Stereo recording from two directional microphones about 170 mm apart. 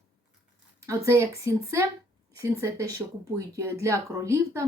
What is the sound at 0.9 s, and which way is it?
A woman's voice, 15° right (ahead or behind).